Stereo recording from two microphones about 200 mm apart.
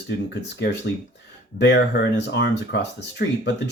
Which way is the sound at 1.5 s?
60° left (ahead or behind).